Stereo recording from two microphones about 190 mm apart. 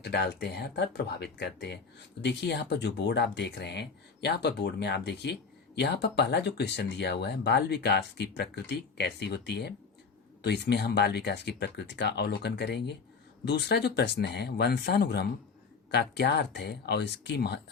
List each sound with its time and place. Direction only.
0.0 s speech: 60° left (ahead or behind)